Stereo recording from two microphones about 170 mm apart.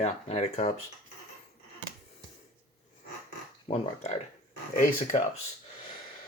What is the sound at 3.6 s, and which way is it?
Speech, 40° left (ahead or behind).